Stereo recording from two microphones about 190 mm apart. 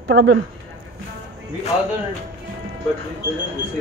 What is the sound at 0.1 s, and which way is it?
Speech, 65° right (ahead or behind).